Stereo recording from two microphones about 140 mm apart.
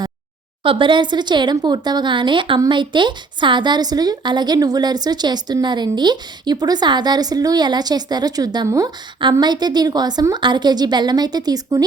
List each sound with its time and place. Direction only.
0.6 s speech: 40° right (ahead or behind)